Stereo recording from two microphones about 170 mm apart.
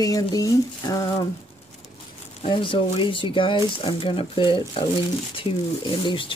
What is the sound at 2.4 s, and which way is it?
Speech, 30° left (ahead or behind).